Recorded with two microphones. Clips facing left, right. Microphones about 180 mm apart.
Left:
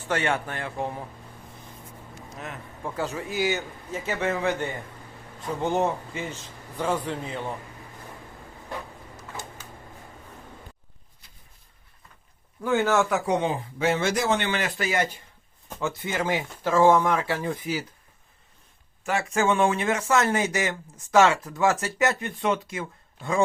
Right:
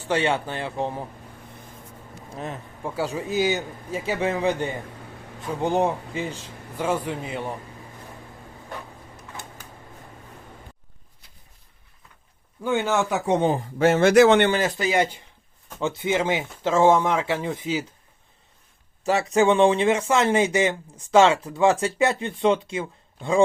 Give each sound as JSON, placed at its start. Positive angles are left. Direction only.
{"t": 0.3, "sound": "speech", "side_deg": -20}
{"t": 2.3, "sound": "speech", "side_deg": -30}
{"t": 2.8, "sound": "a man's voice", "side_deg": -10}
{"t": 9.1, "sound": "a sound", "side_deg": -60}
{"t": 12.6, "sound": "speech", "side_deg": -20}
{"t": 13.4, "sound": "a man's voice", "side_deg": -45}
{"t": 14.8, "sound": "speech", "side_deg": -20}
{"t": 19.5, "sound": "speech", "side_deg": -25}